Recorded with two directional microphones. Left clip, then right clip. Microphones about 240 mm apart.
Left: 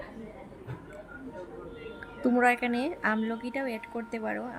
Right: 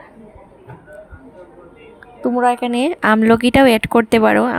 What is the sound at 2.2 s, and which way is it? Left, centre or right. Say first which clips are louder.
Speech: right 9 dB; centre.